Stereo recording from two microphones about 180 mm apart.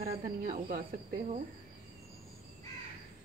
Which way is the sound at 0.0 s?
50° right (ahead or behind).